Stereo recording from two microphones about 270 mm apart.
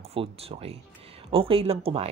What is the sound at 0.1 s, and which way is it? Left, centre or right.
Speech, right.